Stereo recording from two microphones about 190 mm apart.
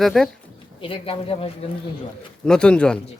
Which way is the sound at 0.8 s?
30° left (ahead or behind).